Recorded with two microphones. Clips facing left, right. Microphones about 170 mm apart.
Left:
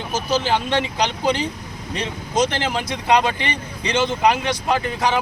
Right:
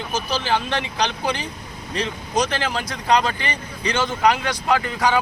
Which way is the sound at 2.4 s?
20° left (ahead or behind).